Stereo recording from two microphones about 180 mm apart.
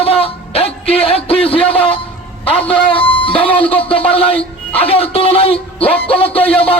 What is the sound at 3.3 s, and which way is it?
Speech, 30° left (ahead or behind).